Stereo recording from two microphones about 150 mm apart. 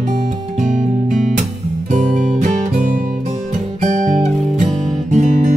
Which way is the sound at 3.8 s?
55° right (ahead or behind).